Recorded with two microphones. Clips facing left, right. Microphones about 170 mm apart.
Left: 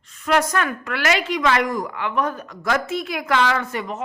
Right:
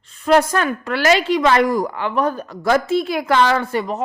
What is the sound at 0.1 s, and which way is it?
Speech, 30° right (ahead or behind).